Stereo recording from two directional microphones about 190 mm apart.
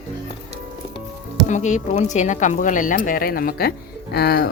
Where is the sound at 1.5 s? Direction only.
40° left (ahead or behind).